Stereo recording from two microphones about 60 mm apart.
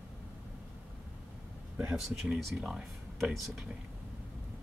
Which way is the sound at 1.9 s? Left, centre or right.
Centre.